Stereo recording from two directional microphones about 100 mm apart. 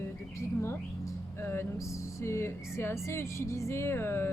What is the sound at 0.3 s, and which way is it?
Speech, 25° left (ahead or behind).